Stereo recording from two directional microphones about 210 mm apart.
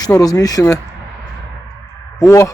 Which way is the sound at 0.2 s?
15° left (ahead or behind).